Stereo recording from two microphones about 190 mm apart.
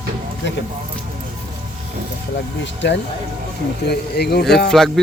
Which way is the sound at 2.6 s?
70° left (ahead or behind).